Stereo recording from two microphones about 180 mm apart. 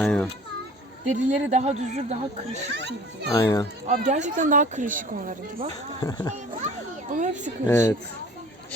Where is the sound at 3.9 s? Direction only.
40° right (ahead or behind).